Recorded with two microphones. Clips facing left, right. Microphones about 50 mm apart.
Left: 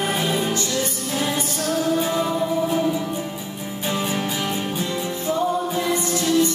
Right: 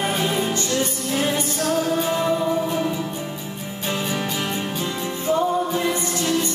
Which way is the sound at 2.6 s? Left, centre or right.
Centre.